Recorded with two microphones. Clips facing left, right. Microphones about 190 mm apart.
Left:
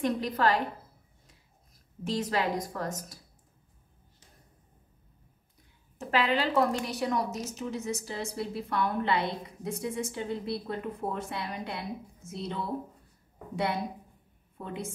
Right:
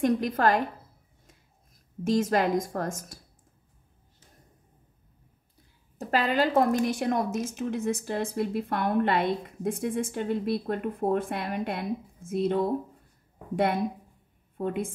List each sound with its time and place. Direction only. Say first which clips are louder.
0.0 s a woman's voice: right 4 dB; 45° right (ahead or behind)
2.0 s a woman's voice: right 6 dB; 45° right (ahead or behind)
5.9 s a woman's voice: right 2 dB; 45° right (ahead or behind)
14.6 s a woman's voice: right 8 dB; 55° right (ahead or behind)